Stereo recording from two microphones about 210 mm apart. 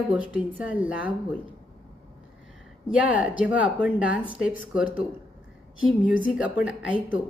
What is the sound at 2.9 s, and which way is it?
A woman's voice, 5° right (ahead or behind).